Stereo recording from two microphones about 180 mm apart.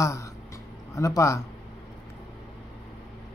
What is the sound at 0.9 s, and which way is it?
Speech, 20° left (ahead or behind).